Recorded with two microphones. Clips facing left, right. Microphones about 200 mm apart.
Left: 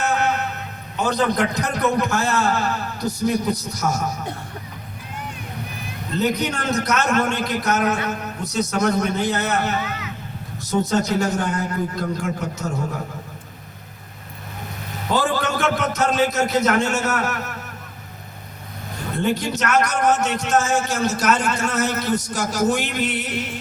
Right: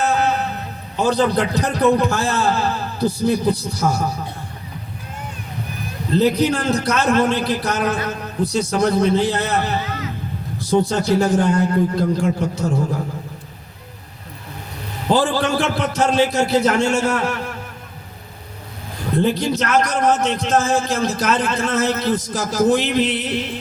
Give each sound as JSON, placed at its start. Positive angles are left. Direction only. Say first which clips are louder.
{"t": 0.0, "sound": "a sound", "louder": "right 3 dB", "side_deg": -30}
{"t": 0.9, "sound": "a man's voice", "louder": "right 3 dB", "side_deg": -30}
{"t": 6.1, "sound": "a man's voice", "louder": "right 6 dB", "side_deg": -30}
{"t": 15.0, "sound": "a man's voice", "louder": "right 4 dB", "side_deg": -30}
{"t": 19.1, "sound": "a man's voice", "louder": "right 4 dB", "side_deg": -35}